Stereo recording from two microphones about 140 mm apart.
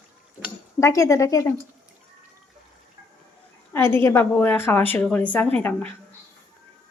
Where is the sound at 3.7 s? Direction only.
15° left (ahead or behind).